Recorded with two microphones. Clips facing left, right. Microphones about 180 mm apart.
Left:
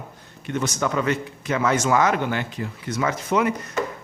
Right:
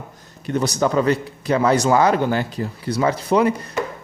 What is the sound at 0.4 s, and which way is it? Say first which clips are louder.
A man's voice: right 5 dB; 35° right (ahead or behind).